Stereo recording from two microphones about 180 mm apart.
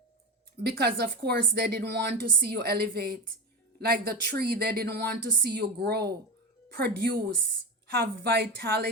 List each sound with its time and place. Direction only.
0.6 s speech: 60° right (ahead or behind)